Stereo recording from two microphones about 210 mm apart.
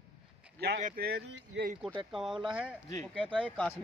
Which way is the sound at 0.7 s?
40° right (ahead or behind).